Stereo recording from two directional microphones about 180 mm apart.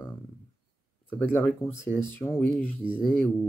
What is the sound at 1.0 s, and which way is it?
Speech, 10° left (ahead or behind).